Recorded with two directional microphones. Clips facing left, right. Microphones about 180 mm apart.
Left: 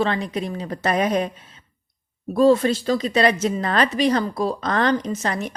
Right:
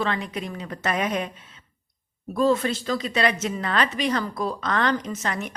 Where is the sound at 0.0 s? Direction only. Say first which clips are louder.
Left 5 dB; 30° left (ahead or behind).